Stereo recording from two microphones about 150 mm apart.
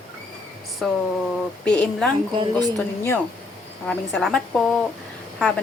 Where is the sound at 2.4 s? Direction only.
25° right (ahead or behind).